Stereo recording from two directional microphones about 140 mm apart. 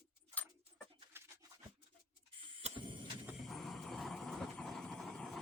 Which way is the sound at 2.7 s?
35° right (ahead or behind).